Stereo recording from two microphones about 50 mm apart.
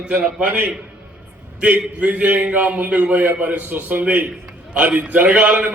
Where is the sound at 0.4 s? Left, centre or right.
Right.